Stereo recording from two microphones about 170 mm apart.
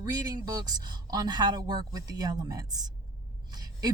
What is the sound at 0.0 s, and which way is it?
Speech, 20° right (ahead or behind).